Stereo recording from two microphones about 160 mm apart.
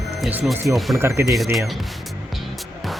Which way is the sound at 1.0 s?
15° right (ahead or behind).